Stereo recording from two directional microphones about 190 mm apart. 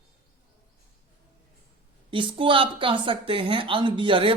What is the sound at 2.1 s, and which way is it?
Speech, 25° right (ahead or behind).